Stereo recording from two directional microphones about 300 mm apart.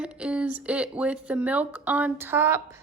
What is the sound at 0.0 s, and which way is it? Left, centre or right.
Speech, centre.